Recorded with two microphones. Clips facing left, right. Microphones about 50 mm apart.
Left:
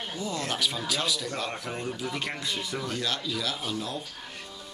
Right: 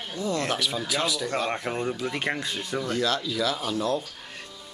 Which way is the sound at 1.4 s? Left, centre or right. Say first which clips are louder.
Right 5 dB; right.